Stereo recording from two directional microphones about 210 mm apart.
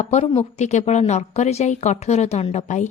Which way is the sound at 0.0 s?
35° left (ahead or behind).